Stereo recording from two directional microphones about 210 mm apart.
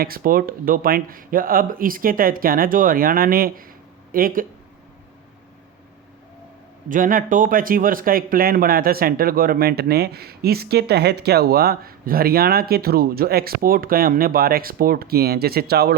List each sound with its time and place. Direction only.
0.0 s speech: 45° right (ahead or behind)
6.8 s speech: 40° right (ahead or behind)